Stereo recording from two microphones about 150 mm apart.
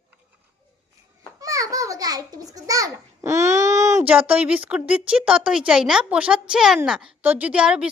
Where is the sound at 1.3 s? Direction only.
25° right (ahead or behind).